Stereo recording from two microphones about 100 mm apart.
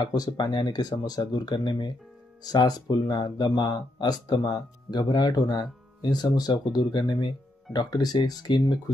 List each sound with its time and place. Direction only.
0.0 s speech: 40° left (ahead or behind)